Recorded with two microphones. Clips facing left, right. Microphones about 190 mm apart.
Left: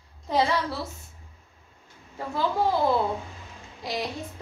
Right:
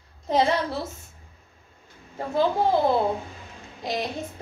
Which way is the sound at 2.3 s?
20° right (ahead or behind).